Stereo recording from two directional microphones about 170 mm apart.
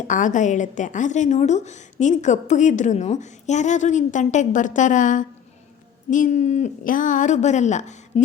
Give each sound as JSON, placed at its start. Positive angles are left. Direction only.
{"t": 0.1, "sound": "a woman's voice", "side_deg": 50}